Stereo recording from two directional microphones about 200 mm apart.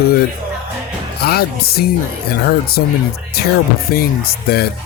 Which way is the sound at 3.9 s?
50° left (ahead or behind).